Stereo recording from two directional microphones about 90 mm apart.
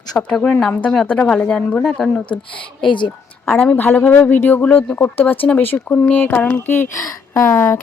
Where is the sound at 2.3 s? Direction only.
70° left (ahead or behind).